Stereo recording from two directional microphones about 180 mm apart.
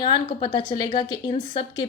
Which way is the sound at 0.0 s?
25° left (ahead or behind).